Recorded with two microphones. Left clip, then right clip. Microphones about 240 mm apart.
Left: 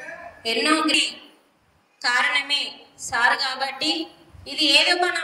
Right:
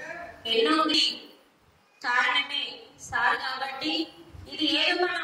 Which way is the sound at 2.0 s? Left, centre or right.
Left.